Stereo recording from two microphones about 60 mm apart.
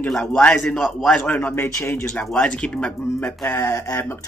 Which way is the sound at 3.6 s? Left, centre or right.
Left.